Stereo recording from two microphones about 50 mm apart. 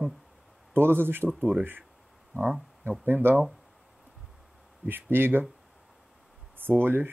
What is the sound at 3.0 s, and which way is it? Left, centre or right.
Speech, right.